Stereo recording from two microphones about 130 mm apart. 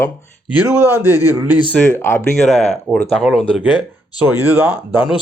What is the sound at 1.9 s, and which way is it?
Speech, 20° left (ahead or behind).